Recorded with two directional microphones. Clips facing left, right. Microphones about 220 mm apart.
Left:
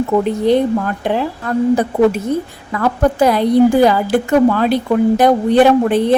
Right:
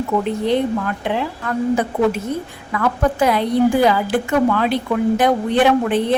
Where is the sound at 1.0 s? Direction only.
40° left (ahead or behind).